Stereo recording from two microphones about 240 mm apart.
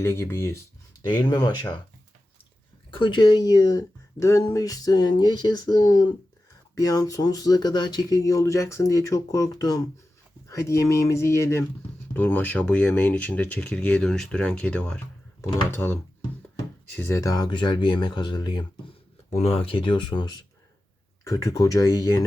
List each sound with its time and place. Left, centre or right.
0.0 s speech: centre
2.9 s speech: centre
21.2 s speech: centre